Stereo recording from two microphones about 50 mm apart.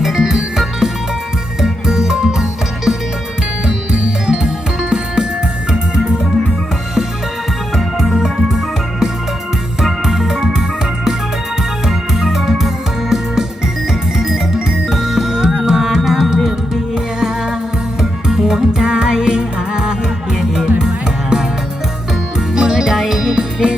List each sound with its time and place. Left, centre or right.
0.0 s music: centre
7.8 s music: centre
11.9 s music: centre
14.8 s music: centre
22.5 s music: centre